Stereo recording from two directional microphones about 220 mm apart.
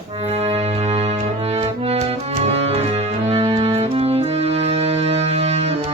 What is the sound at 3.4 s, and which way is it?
Music, 25° right (ahead or behind).